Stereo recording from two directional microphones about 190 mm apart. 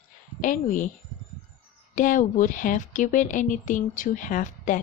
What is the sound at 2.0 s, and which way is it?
A woman's voice, 45° left (ahead or behind).